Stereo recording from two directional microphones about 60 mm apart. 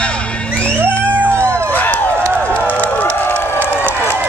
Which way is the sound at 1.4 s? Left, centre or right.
Right.